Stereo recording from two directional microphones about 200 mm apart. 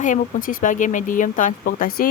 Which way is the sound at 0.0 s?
40° left (ahead or behind).